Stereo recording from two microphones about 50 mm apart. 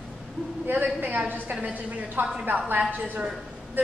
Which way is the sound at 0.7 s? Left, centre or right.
Right.